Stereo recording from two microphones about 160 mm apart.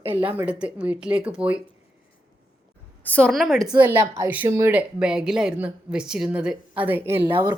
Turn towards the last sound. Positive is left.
turn(degrees=-30)  # may be behind; listen again after turning